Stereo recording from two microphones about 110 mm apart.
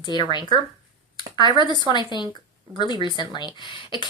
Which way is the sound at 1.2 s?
45° left (ahead or behind).